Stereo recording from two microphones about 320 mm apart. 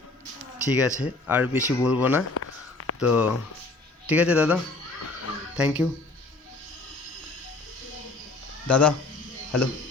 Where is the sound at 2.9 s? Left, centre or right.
Centre.